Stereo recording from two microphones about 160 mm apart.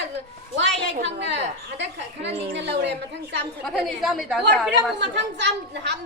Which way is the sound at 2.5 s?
90° right.